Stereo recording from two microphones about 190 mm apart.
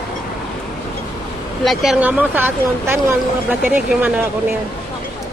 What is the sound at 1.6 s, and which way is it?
Speech, centre (ahead or behind).